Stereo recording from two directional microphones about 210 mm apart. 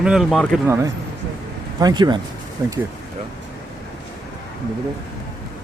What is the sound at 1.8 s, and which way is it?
Speech, 20° right (ahead or behind).